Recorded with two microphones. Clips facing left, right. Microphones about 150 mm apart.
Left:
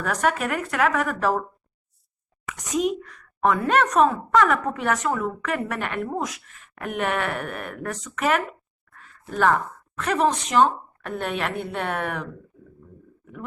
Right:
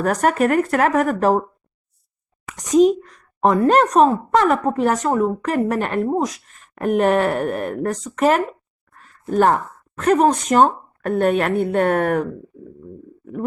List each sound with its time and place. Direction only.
0.0 s a woman's voice: 45° right (ahead or behind)
2.6 s speech: 35° right (ahead or behind)
8.9 s a sound: 40° right (ahead or behind)
10.0 s a woman's voice: 45° right (ahead or behind)